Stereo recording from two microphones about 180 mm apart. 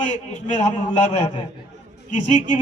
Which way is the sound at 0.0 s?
40° left (ahead or behind).